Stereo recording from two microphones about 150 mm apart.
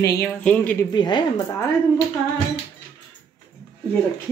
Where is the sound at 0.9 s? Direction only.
30° left (ahead or behind).